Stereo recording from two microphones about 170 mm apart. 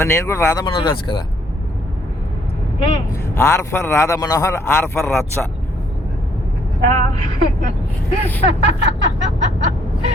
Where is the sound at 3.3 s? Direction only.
15° left (ahead or behind).